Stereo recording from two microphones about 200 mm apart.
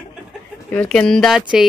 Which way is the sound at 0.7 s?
5° left (ahead or behind).